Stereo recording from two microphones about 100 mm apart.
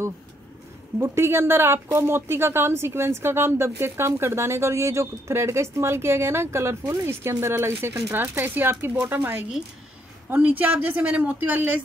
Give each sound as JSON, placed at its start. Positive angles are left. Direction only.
{"t": 0.9, "sound": "speech", "side_deg": -25}